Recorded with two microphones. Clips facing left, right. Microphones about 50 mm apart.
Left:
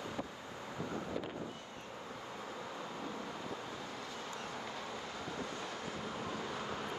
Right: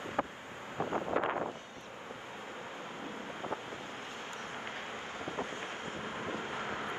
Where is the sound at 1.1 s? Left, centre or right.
Right.